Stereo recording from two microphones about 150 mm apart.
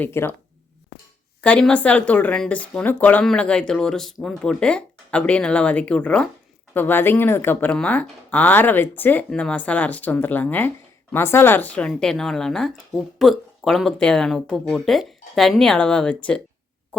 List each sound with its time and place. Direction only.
0.0 s speech: 15° left (ahead or behind)
1.4 s a woman's voice: 5° left (ahead or behind)